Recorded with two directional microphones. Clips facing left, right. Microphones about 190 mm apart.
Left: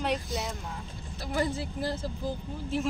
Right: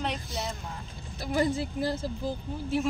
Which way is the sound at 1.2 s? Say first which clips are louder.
Right 3 dB; 15° right (ahead or behind).